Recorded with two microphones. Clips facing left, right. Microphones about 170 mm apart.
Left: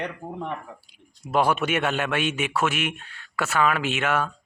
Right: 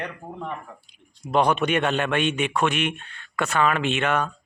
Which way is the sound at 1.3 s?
5° left (ahead or behind).